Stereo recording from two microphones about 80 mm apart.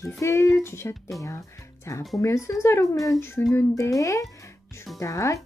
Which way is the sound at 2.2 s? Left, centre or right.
Left.